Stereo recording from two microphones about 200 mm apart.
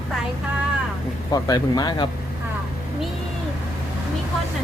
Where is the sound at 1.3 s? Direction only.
20° left (ahead or behind).